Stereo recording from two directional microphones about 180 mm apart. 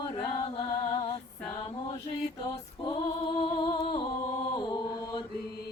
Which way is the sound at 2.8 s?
25° left (ahead or behind).